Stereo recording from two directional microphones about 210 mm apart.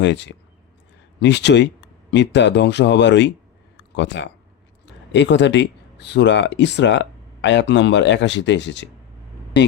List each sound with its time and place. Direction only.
0.0 s speech: 55° left (ahead or behind)
3.8 s a sound: 55° left (ahead or behind)
5.1 s speech: 55° left (ahead or behind)